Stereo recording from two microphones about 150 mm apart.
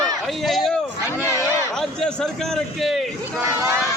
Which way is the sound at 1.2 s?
20° left (ahead or behind).